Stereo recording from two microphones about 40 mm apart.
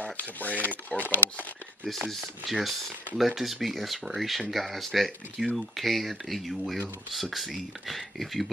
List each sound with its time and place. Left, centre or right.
0.0 s speech: left
1.9 s speech: centre